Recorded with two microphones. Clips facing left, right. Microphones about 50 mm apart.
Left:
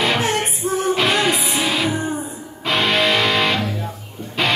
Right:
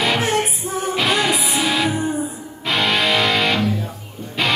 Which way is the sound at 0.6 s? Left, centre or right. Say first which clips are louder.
Left 4 dB; left.